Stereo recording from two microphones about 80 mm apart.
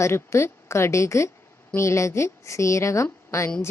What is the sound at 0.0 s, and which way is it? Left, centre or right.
A woman's voice, left.